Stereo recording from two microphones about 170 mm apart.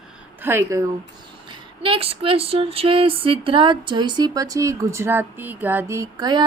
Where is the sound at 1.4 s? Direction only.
30° right (ahead or behind).